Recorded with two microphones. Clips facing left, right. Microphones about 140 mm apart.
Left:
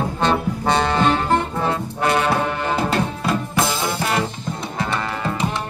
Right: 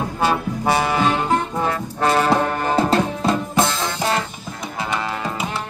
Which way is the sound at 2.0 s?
30° right (ahead or behind).